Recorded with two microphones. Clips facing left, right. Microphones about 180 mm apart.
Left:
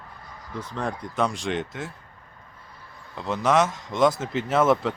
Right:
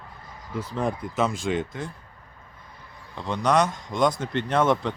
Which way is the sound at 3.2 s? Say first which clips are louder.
Left 1 dB; 5° left (ahead or behind).